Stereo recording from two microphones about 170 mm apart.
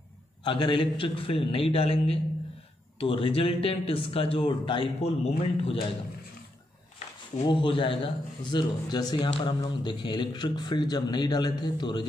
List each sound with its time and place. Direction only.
0.4 s speech: 30° left (ahead or behind)
7.4 s a man's voice: 30° left (ahead or behind)